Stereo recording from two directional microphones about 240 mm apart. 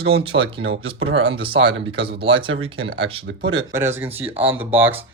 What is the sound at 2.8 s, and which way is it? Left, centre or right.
Speech, right.